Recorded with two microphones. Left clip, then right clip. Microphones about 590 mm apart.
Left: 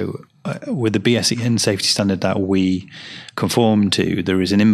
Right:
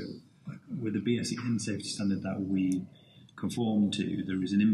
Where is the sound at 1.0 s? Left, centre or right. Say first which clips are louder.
Left 15 dB; left.